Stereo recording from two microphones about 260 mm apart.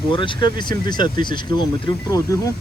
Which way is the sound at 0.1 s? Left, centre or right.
Centre.